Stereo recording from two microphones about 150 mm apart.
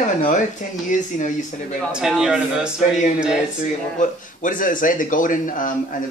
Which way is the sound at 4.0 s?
60° left (ahead or behind).